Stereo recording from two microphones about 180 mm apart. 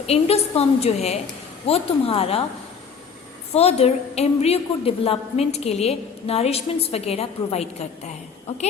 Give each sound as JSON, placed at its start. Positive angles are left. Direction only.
{"t": 0.1, "sound": "a woman's voice", "side_deg": 35}
{"t": 3.5, "sound": "a woman's voice", "side_deg": 35}